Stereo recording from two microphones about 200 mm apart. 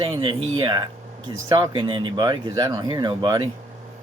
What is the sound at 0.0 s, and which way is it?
Speech, 25° right (ahead or behind).